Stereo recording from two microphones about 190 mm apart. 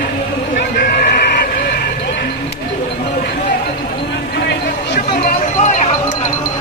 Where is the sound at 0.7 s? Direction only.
55° left (ahead or behind).